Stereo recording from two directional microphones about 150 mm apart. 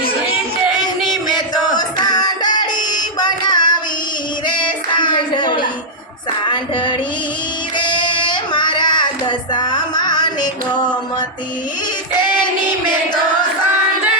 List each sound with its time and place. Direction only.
1.3 s music: 30° left (ahead or behind)
4.4 s a sound: 30° left (ahead or behind)
6.5 s music: 30° left (ahead or behind)
7.8 s child singing: 30° left (ahead or behind)